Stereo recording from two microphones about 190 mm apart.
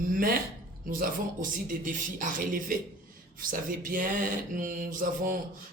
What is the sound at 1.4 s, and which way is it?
Speech, 45° right (ahead or behind).